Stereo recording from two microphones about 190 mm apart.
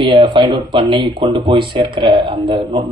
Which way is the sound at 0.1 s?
25° right (ahead or behind).